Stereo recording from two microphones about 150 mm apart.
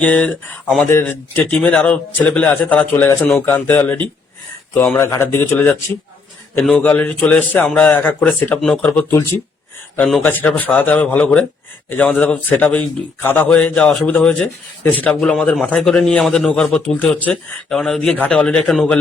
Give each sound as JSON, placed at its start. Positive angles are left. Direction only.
{"t": 0.0, "sound": "a man's voice", "side_deg": 10}
{"t": 10.0, "sound": "a man's voice", "side_deg": 0}